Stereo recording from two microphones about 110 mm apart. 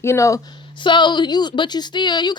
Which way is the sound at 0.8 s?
45° left (ahead or behind).